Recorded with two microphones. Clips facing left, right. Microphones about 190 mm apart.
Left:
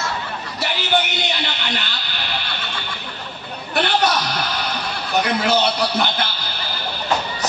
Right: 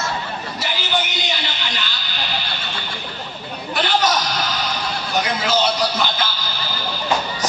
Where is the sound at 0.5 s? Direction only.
60° left (ahead or behind).